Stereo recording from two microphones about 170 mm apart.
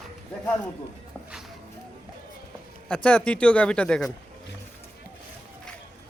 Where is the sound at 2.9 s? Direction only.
5° left (ahead or behind).